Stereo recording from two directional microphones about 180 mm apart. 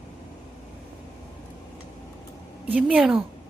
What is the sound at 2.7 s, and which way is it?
Speech, 5° right (ahead or behind).